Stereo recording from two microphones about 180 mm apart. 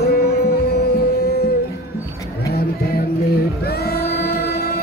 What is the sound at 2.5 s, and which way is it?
Music, 60° left (ahead or behind).